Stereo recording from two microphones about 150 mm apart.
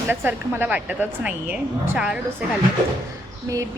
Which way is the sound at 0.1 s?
15° right (ahead or behind).